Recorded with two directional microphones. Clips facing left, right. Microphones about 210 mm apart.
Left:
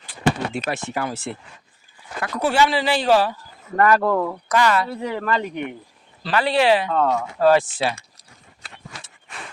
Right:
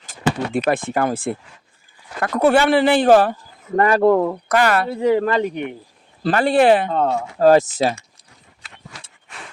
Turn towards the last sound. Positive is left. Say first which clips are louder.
# right 4 dB
turn(degrees=-40)  # may be behind; listen again after turning